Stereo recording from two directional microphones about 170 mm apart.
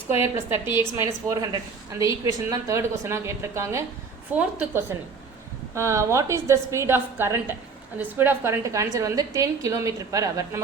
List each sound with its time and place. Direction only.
0.2 s a woman's voice: 15° right (ahead or behind)